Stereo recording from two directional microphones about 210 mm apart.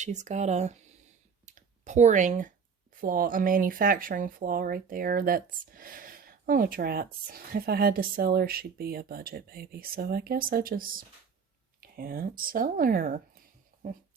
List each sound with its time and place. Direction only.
0.0 s speech: 35° right (ahead or behind)
1.5 s a sound: 35° right (ahead or behind)
2.9 s speech: 40° right (ahead or behind)